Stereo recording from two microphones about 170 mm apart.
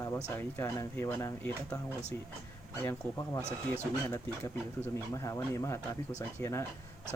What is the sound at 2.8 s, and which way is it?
Speech, 15° left (ahead or behind).